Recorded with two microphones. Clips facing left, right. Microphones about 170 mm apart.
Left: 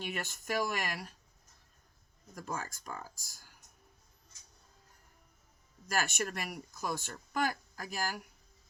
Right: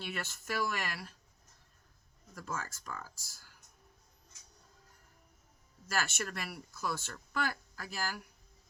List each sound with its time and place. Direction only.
0.0 s speech: 15° left (ahead or behind)
2.4 s speech: 15° left (ahead or behind)
5.9 s speech: 15° left (ahead or behind)